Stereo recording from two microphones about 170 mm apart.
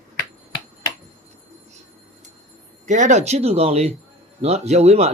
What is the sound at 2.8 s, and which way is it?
Speech, 45° right (ahead or behind).